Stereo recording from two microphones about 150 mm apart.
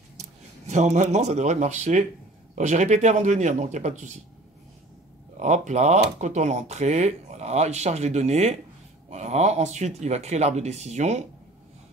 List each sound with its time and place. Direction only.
0.2 s speech: 50° right (ahead or behind)
5.4 s speech: 50° right (ahead or behind)